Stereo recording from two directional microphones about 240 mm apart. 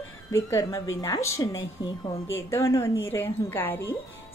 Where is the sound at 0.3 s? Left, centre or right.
Centre.